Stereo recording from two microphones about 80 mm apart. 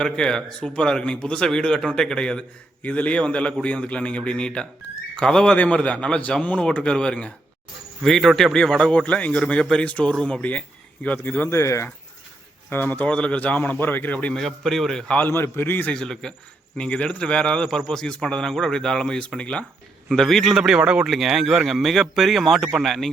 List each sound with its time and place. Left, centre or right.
0.0 s speech: centre
8.0 s speech: centre; by 11.4 s left
11.4 s speech: left
12.7 s speech: left
14.4 s speech: centre
15.2 s speech: left
15.9 s speech: centre
20.1 s speech: centre
21.1 s speech: centre